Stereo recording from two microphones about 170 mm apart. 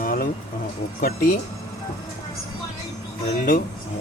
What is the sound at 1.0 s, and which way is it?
Speech, 60° left (ahead or behind).